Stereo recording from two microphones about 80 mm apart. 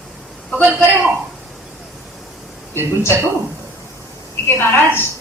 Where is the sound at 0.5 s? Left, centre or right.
Centre.